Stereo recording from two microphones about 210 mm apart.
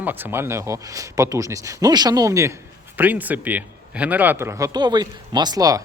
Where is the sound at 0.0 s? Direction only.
10° right (ahead or behind).